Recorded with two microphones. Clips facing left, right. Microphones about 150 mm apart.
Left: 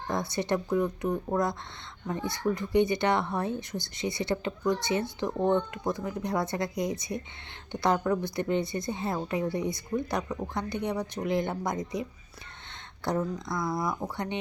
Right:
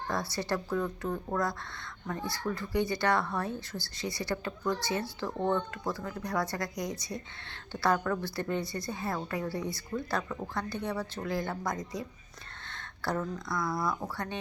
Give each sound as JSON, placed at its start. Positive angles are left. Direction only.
{"t": 0.1, "sound": "speech", "side_deg": 20}